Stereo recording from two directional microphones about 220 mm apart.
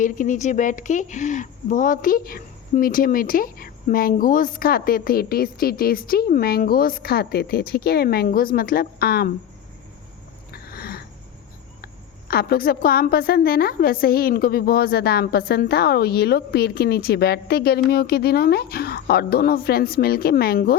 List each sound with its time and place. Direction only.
0.0 s speech: 35° left (ahead or behind)
10.5 s a sound: 45° left (ahead or behind)
12.3 s a woman's voice: 45° left (ahead or behind)